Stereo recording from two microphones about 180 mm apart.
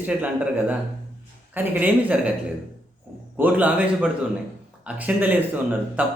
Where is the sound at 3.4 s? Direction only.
10° right (ahead or behind).